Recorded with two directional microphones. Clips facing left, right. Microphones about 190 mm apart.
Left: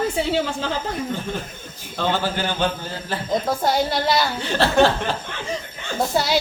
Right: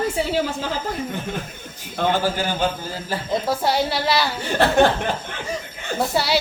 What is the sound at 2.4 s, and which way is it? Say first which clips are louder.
A woman's voice: even; 10° right (ahead or behind).